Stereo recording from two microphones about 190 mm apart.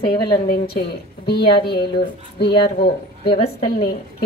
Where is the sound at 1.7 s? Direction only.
25° left (ahead or behind).